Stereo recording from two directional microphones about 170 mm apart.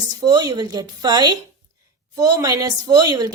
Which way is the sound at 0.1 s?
25° right (ahead or behind).